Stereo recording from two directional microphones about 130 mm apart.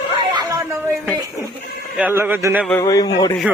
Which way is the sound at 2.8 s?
30° left (ahead or behind).